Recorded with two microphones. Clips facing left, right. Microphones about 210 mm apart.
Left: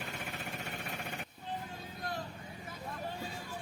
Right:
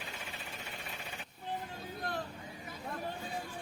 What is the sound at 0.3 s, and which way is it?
Jackhammer, 60° left (ahead or behind).